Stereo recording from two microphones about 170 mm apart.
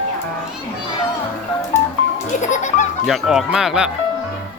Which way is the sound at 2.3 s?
45° left (ahead or behind).